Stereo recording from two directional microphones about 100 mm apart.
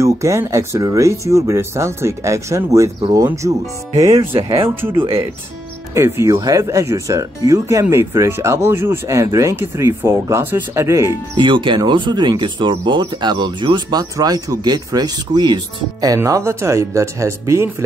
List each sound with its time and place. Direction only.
0.0 s speech: 30° right (ahead or behind)
4.2 s speech: 65° right (ahead or behind)
5.9 s speech: 25° right (ahead or behind)
11.3 s speech: 50° right (ahead or behind)
16.3 s speech: 30° right (ahead or behind)